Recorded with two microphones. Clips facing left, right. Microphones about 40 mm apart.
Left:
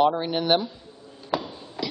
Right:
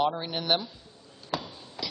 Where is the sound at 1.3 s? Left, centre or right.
Centre.